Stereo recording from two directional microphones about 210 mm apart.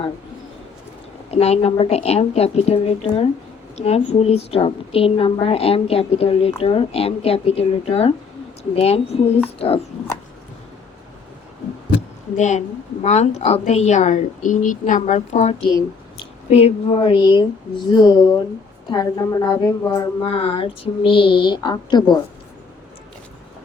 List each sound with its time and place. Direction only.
1.3 s a woman's voice: 30° left (ahead or behind)
12.4 s a woman's voice: 35° left (ahead or behind); by 20.1 s 15° left (ahead or behind)
20.2 s a woman's voice: 25° left (ahead or behind)